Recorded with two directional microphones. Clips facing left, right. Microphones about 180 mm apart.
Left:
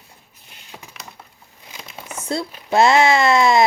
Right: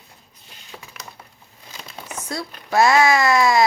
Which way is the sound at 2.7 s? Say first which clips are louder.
Left 2 dB; 25° left (ahead or behind).